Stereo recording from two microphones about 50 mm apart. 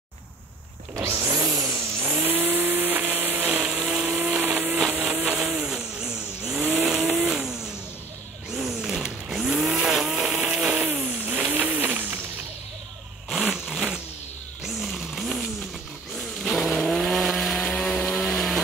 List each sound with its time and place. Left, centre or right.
1.1 s vehicle: right
2.1 s vehicle: right
3.6 s vehicle: right
4.9 s vehicle: right
5.4 s vehicle: centre
6.6 s vehicle: right
6.9 s vehicle: centre
9.8 s vehicle: centre
10.1 s vehicle: right
13.4 s zipper: centre
14.6 s vehicle: centre
17.8 s chainsaw: centre